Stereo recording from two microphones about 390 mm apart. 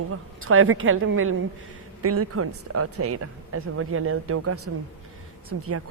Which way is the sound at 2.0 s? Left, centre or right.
Right.